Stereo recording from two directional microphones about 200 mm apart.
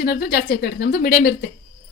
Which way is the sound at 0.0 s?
50° left (ahead or behind).